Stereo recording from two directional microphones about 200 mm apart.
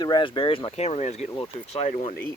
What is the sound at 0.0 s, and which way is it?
Speech, 25° left (ahead or behind).